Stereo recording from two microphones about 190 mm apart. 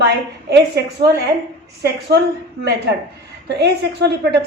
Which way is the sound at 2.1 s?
60° right (ahead or behind).